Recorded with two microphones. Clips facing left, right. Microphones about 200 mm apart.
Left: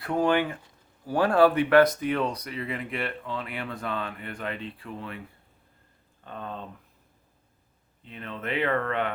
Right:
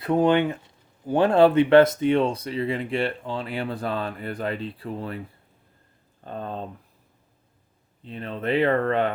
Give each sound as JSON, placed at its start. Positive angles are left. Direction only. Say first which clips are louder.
{"t": 0.0, "sound": "speech", "louder": "right 5 dB", "side_deg": -20}
{"t": 6.2, "sound": "speech", "louder": "right 5 dB", "side_deg": -35}
{"t": 8.0, "sound": "speech", "louder": "right 7 dB", "side_deg": -35}